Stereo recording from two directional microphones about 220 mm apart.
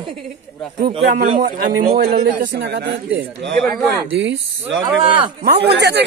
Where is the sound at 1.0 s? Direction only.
45° right (ahead or behind).